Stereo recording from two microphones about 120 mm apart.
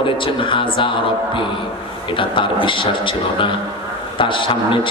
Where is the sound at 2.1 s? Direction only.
45° left (ahead or behind).